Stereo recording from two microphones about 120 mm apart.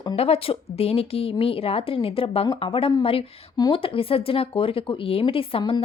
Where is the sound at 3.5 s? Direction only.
40° left (ahead or behind).